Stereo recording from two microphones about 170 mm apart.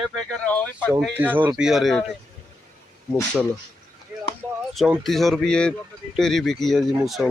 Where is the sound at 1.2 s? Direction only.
10° right (ahead or behind).